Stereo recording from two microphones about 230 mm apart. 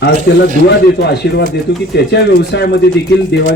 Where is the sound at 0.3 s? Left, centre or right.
Left.